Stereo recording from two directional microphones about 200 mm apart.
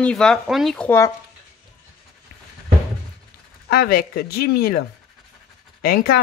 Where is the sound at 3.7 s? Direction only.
50° left (ahead or behind).